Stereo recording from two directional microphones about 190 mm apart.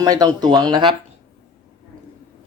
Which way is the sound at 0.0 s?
20° right (ahead or behind).